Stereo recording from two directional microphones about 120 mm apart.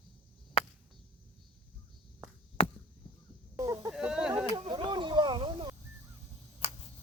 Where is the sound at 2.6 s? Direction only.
55° left (ahead or behind).